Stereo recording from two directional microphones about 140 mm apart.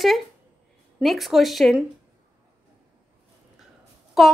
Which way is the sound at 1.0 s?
Centre (ahead or behind).